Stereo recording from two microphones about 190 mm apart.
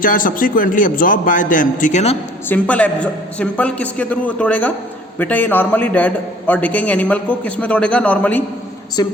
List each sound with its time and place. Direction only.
0.0 s a man's voice: 45° left (ahead or behind)
2.5 s a man's voice: 5° left (ahead or behind)